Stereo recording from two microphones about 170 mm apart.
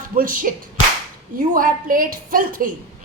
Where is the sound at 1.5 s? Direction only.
55° right (ahead or behind).